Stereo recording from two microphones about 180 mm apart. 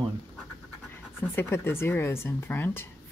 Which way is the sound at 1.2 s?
15° left (ahead or behind).